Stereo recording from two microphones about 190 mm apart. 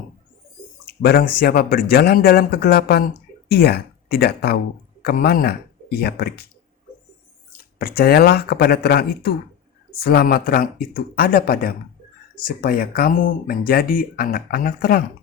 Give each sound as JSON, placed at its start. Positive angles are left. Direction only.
{"t": 1.0, "sound": "speech", "side_deg": 50}
{"t": 7.8, "sound": "speech", "side_deg": 50}